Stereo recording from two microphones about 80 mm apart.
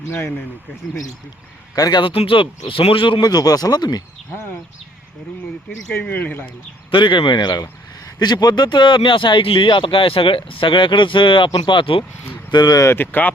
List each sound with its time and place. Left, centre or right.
1.7 s a man's voice: left
2.0 s speech: left
5.9 s speech: left
6.9 s speech: left
12.5 s speech: left
12.9 s speech: left